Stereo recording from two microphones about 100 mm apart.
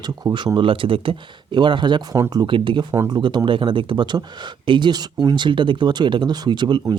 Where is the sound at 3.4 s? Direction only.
60° right (ahead or behind).